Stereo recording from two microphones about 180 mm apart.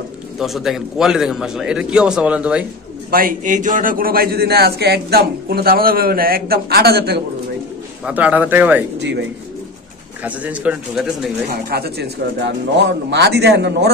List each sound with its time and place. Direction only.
0.4 s a man's voice: centre (ahead or behind)
3.1 s a man's voice: 50° right (ahead or behind)
8.0 s speech: 10° right (ahead or behind)
9.0 s speech: 80° right
10.2 s speech: 10° right (ahead or behind)
11.7 s a man's voice: 65° right (ahead or behind)